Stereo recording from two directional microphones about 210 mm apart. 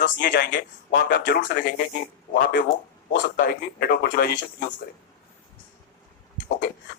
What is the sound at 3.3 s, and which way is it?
Speech, 50° left (ahead or behind).